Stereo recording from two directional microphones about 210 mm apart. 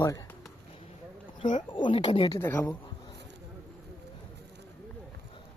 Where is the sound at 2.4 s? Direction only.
10° left (ahead or behind).